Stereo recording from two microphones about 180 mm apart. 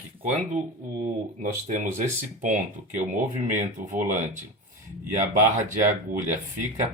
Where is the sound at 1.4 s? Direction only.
50° right (ahead or behind).